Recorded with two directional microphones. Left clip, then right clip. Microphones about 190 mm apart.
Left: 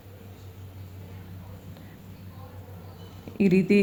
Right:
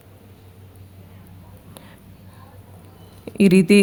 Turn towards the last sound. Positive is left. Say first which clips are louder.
# right 7 dB
turn(degrees=-55)  # may be behind; listen again after turning